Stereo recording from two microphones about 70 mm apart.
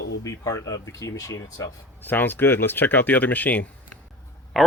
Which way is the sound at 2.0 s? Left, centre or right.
Left.